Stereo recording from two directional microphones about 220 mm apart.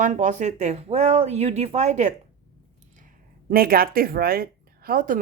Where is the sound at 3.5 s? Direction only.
40° right (ahead or behind).